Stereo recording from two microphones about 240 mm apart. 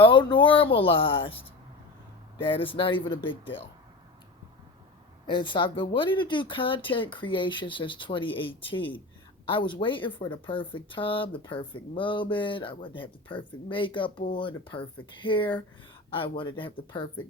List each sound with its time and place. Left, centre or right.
0.0 s speech: centre
2.4 s speech: left
5.2 s speech: centre